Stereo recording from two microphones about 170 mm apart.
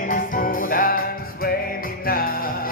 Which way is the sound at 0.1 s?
60° left (ahead or behind).